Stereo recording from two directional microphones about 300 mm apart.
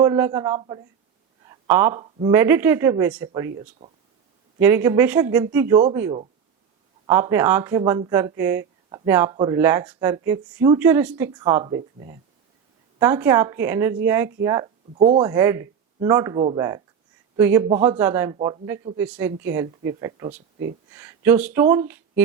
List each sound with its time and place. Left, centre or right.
0.0 s speech: centre
1.5 s a sound: centre
2.3 s speech: centre
3.8 s speech: right
4.6 s speech: centre